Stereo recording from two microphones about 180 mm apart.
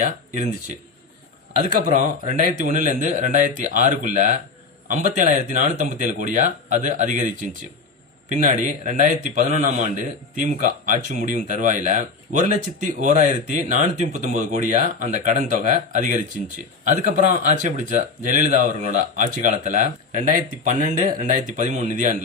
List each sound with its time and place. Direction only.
1.6 s speech: 45° right (ahead or behind)
8.3 s speech: 45° right (ahead or behind)